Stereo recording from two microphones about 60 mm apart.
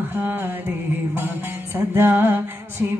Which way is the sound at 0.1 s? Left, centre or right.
Right.